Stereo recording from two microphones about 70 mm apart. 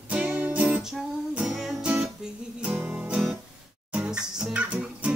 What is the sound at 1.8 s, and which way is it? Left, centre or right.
Guitar, centre.